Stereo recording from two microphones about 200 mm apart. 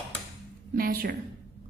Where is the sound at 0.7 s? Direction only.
45° right (ahead or behind).